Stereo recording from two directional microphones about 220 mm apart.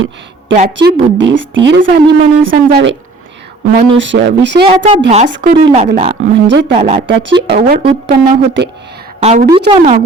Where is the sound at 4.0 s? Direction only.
55° right (ahead or behind).